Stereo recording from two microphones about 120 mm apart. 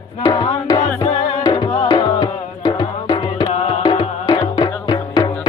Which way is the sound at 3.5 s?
60° left (ahead or behind).